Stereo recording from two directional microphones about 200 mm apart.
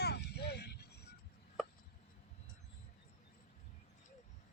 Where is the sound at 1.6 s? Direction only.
Centre (ahead or behind).